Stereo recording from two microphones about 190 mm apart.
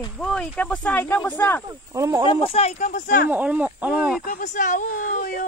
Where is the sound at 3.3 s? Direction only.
10° right (ahead or behind).